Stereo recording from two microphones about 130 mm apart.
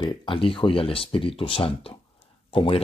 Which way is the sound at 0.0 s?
40° left (ahead or behind).